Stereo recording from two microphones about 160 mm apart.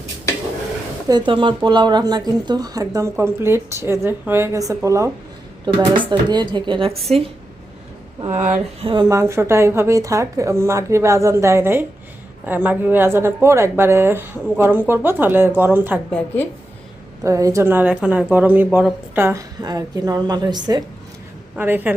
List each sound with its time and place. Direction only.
1.0 s speech: 25° right (ahead or behind)
8.4 s speech: 45° right (ahead or behind)
8.9 s speech: 30° right (ahead or behind)
9.1 s speech: 15° right (ahead or behind)
17.2 s speech: 20° right (ahead or behind)
21.5 s a woman's voice: 10° right (ahead or behind)